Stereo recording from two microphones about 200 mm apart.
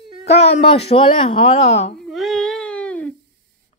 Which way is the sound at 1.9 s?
Centre (ahead or behind).